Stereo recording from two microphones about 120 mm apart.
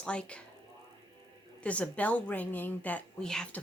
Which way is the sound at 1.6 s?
10° left (ahead or behind).